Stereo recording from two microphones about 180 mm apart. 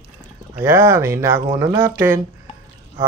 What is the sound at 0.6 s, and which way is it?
Speech, 15° right (ahead or behind).